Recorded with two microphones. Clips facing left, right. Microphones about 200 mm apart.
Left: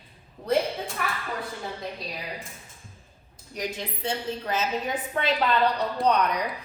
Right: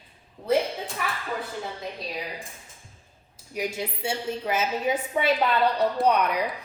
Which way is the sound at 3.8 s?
10° right (ahead or behind).